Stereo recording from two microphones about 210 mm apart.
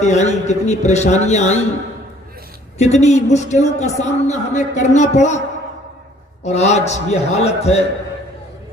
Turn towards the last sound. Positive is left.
turn(degrees=30)  # may be behind; listen again after turning